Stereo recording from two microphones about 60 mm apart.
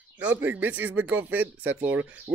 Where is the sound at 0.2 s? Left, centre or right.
Right.